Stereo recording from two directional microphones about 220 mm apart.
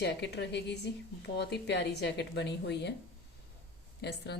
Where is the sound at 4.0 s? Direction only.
50° left (ahead or behind).